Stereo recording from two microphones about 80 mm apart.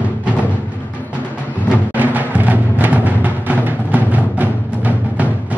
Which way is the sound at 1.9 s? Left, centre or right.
Right.